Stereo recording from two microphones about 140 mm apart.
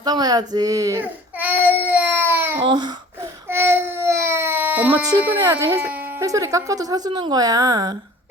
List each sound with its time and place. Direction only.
0.0 s speech: 30° right (ahead or behind)
1.4 s child singing: 10° right (ahead or behind)
2.6 s babbling: 30° right (ahead or behind)
3.5 s baby cry: 15° right (ahead or behind)
5.2 s speech: 15° right (ahead or behind)